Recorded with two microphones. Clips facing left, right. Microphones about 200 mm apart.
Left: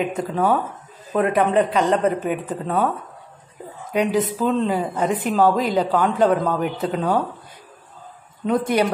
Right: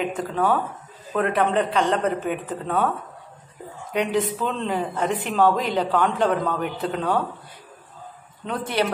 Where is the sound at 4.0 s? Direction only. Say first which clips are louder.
Left 3 dB; 40° left (ahead or behind).